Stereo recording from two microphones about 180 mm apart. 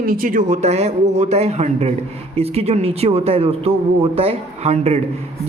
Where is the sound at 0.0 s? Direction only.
50° right (ahead or behind).